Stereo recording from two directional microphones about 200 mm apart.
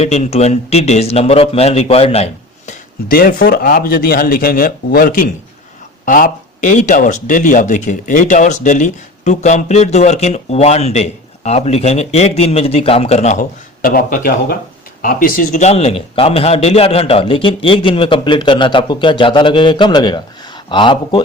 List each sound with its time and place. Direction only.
0.0 s speech: 35° left (ahead or behind)
3.1 s a man's voice: 45° left (ahead or behind); by 21.2 s 25° left (ahead or behind)